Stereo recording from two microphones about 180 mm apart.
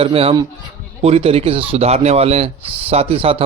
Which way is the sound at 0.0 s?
30° right (ahead or behind).